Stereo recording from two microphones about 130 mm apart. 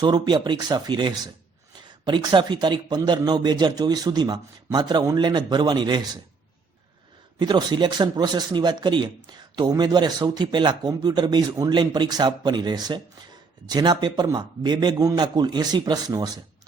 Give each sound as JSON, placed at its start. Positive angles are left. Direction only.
{"t": 0.0, "sound": "speech", "side_deg": -35}
{"t": 7.3, "sound": "speech", "side_deg": -35}